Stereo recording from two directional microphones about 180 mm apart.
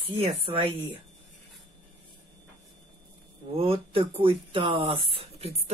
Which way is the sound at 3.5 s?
30° right (ahead or behind).